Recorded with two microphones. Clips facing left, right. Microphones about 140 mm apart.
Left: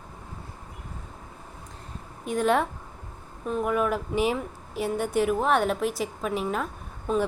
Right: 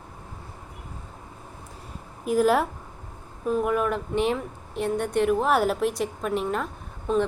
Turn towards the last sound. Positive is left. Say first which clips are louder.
# right 2 dB
turn(degrees=5)  # may be behind; listen again after turning